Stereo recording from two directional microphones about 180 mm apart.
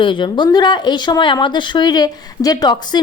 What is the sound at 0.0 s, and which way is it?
Speech, 25° left (ahead or behind).